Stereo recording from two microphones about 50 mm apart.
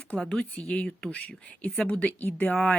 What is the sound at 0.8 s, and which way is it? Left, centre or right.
Speech, left.